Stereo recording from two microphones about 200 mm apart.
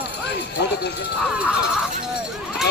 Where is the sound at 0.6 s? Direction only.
55° left (ahead or behind).